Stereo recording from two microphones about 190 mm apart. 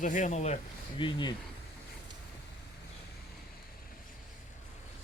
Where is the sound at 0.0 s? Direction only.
40° left (ahead or behind); by 1.3 s 25° left (ahead or behind).